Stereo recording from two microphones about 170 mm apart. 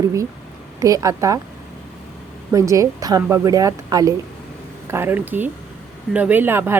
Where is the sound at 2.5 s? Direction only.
20° right (ahead or behind).